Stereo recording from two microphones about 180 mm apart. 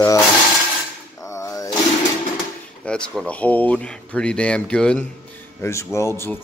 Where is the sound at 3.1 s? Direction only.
5° left (ahead or behind).